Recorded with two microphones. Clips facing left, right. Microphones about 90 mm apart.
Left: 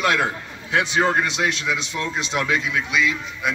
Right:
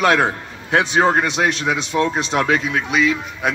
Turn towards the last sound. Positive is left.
turn(degrees=-45)  # may be behind; listen again after turning